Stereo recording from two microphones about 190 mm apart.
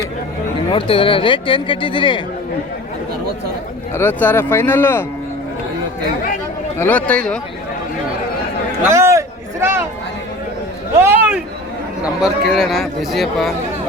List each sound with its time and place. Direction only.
0.7 s speech: 30° left (ahead or behind)
3.9 s speech: 10° left (ahead or behind)
6.7 s speech: 10° left (ahead or behind)
8.8 s a sound: 15° right (ahead or behind)
10.9 s a sound: 10° right (ahead or behind)
12.0 s speech: 5° right (ahead or behind)